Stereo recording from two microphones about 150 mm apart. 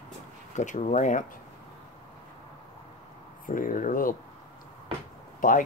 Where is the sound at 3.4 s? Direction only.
65° left (ahead or behind).